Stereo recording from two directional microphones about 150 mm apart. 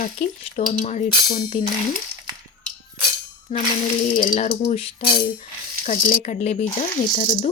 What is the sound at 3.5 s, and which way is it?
Speech, 55° left (ahead or behind).